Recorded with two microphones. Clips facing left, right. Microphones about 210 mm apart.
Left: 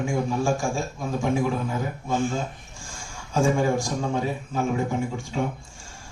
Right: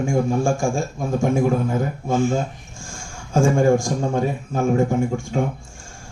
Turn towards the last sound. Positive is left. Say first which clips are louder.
# right 6 dB
turn(degrees=-50)  # may be behind; listen again after turning